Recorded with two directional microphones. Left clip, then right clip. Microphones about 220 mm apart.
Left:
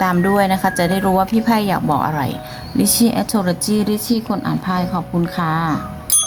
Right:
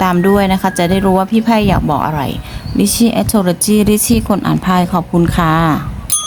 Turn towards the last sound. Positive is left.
turn(degrees=-30)  # may be behind; listen again after turning